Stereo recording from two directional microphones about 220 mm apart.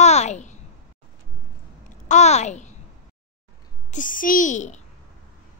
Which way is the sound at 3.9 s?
35° left (ahead or behind).